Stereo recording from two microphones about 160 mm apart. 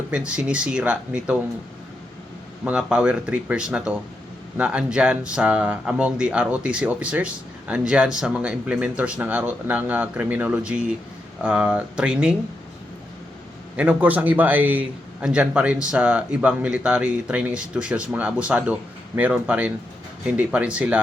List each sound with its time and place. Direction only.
0.1 s speech: 5° right (ahead or behind)
2.6 s speech: 5° right (ahead or behind)
13.7 s speech: 10° right (ahead or behind)